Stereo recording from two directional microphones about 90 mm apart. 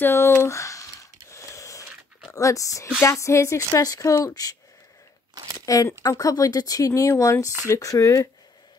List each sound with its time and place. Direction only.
0.0 s a sound: 25° left (ahead or behind)
2.3 s speech: 35° left (ahead or behind)
5.7 s speech: 40° left (ahead or behind)